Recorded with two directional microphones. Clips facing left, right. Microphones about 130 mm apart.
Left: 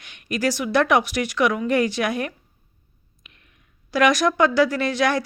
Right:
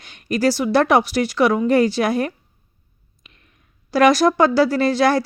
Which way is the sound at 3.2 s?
35° right (ahead or behind).